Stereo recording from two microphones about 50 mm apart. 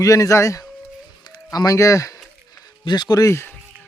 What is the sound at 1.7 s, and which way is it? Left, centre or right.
Speech, left.